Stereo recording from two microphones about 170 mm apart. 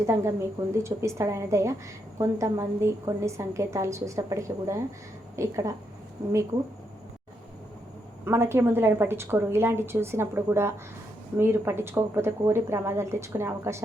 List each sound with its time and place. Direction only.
0.0 s a woman's voice: 15° right (ahead or behind)
8.2 s a woman's voice: 15° right (ahead or behind)